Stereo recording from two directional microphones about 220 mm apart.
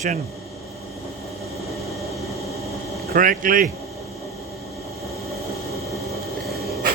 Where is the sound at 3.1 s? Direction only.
40° right (ahead or behind).